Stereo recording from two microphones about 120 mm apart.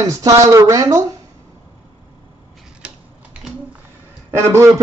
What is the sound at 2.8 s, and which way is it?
Tick-tock, 10° right (ahead or behind).